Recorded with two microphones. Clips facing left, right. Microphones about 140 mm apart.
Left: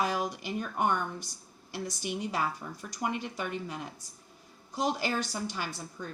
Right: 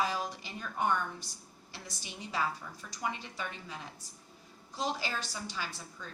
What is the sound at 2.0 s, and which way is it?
Speech, 55° left (ahead or behind).